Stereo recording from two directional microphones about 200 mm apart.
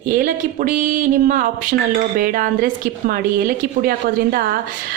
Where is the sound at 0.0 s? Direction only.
40° right (ahead or behind).